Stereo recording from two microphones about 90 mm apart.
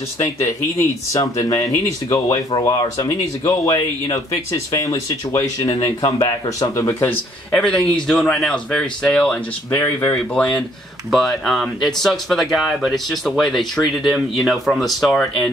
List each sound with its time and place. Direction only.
0.4 s speech: 35° left (ahead or behind); by 6.7 s 50° left (ahead or behind)
6.8 s speech: 30° left (ahead or behind)
7.5 s speech: 10° left (ahead or behind)
9.7 s speech: 25° left (ahead or behind)
10.1 s speech: 10° left (ahead or behind)
11.1 s speech: centre (ahead or behind)